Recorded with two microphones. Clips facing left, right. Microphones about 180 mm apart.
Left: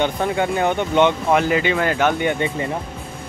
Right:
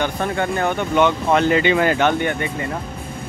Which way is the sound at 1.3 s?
5° left (ahead or behind).